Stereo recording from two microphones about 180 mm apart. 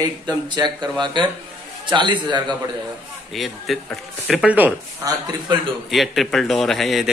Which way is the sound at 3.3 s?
Centre (ahead or behind).